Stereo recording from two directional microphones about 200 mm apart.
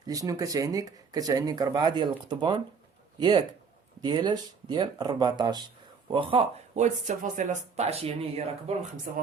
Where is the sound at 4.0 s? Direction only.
20° right (ahead or behind).